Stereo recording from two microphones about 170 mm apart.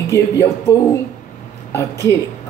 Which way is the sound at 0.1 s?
15° left (ahead or behind).